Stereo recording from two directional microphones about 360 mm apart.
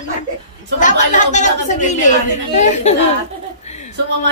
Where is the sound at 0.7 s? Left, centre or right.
Left.